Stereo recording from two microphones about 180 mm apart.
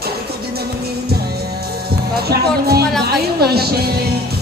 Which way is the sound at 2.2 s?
60° right (ahead or behind).